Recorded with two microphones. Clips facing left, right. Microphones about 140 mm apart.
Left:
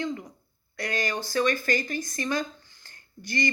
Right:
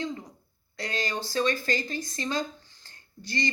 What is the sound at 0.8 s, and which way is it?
Speech, 25° right (ahead or behind).